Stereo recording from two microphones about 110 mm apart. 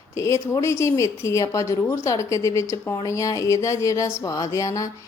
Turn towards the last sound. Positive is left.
turn(degrees=30)  # may be behind; listen again after turning